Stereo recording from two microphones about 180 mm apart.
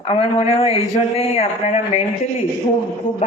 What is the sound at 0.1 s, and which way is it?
A man's voice, 30° left (ahead or behind).